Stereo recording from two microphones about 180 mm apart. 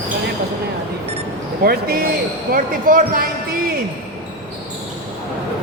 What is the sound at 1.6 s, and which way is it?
Speech, 55° right (ahead or behind).